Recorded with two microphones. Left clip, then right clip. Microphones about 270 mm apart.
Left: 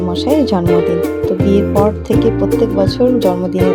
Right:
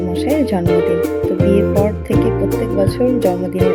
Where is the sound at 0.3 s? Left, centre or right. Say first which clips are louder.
Left 4 dB; centre.